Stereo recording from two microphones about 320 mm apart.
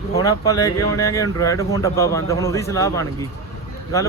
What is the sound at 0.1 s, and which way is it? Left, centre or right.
Speech, centre.